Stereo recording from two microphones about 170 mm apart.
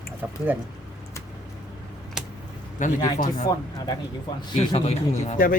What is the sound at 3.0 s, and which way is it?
Speech, 25° left (ahead or behind).